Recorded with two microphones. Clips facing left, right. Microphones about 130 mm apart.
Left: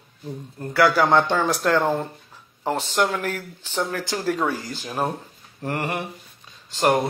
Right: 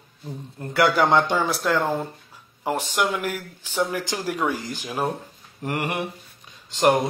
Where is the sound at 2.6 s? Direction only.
10° right (ahead or behind).